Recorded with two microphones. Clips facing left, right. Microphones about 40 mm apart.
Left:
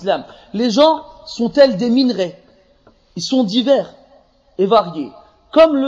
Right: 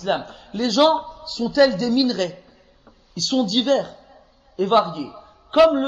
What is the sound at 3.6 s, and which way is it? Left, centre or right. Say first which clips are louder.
A man's voice: left 5 dB; left.